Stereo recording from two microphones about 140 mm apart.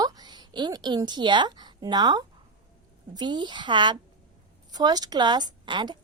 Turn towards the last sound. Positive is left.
turn(degrees=-35)  # may be behind; listen again after turning